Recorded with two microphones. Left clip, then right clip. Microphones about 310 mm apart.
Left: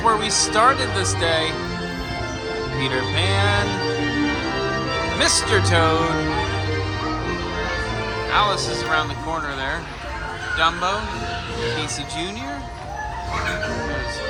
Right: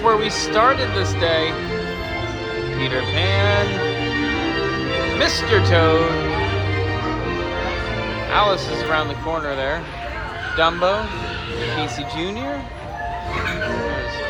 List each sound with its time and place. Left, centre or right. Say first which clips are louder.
0.0 s speech: right 1 dB; centre
2.8 s speech: right 1 dB; centre
5.1 s speech: right 1 dB; centre
8.3 s speech: right 2 dB; centre